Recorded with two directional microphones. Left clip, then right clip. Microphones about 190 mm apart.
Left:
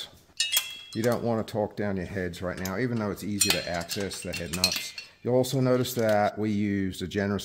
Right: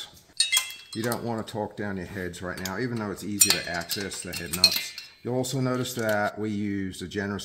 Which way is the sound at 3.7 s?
55° left (ahead or behind).